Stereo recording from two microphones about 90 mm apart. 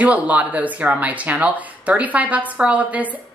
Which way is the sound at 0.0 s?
15° right (ahead or behind).